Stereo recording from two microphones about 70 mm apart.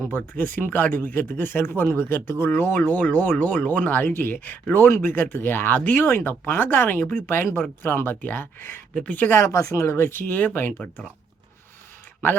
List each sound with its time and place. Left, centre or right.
0.1 s speech: left
9.0 s speech: left
9.4 s speech: left
9.9 s speech: left